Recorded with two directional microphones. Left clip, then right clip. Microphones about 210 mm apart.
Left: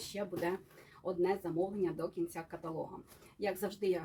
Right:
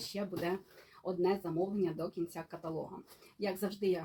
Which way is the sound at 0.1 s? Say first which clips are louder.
Left 1 dB; 10° left (ahead or behind).